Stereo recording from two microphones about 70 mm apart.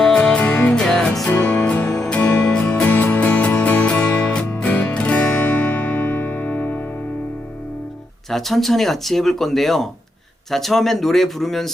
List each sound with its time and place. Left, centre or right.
0.0 s music: centre
0.8 s music: centre
1.3 s music: left
2.0 s music: centre
4.5 s music: left
8.3 s speech: centre